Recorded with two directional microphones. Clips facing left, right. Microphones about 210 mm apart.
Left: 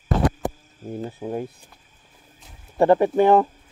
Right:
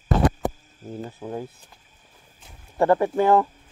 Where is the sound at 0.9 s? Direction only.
15° left (ahead or behind).